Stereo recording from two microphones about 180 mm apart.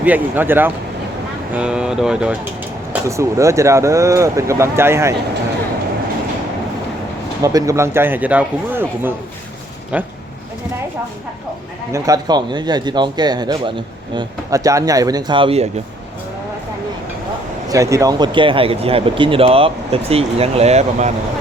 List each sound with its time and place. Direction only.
0.0 s speech: 10° right (ahead or behind)
2.9 s speech: 15° right (ahead or behind)
7.4 s speech: 15° right (ahead or behind)
11.9 s speech: 20° right (ahead or behind); by 15.7 s 35° right (ahead or behind)
17.7 s speech: 15° right (ahead or behind); by 21.1 s 35° right (ahead or behind)